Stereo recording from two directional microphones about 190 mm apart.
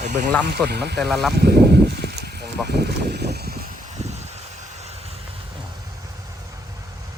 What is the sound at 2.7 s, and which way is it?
Vehicle, 60° right (ahead or behind).